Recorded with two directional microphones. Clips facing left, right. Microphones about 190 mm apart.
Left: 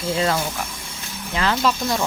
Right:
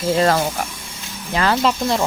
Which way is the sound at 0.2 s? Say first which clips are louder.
Right 4 dB; 50° right (ahead or behind).